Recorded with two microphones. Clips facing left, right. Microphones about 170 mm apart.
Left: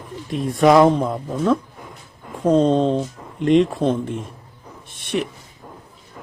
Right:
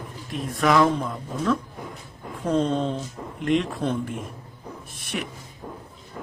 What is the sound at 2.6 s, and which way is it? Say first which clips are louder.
Speech: left 8 dB; 30° left (ahead or behind).